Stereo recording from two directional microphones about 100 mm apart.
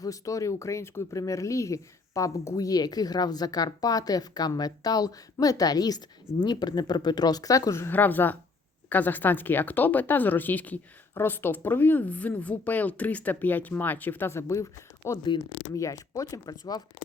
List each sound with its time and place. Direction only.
0.0 s speech: 35° left (ahead or behind)